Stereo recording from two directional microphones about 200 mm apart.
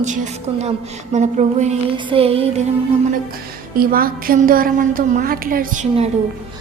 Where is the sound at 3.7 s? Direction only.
45° right (ahead or behind).